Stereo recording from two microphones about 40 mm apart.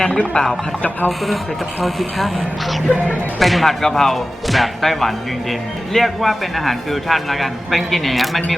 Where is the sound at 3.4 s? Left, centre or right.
Centre.